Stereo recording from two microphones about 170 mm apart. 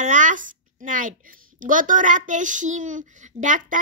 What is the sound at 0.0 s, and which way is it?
Speech, 45° right (ahead or behind).